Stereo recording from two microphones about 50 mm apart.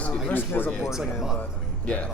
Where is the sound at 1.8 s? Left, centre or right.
Left.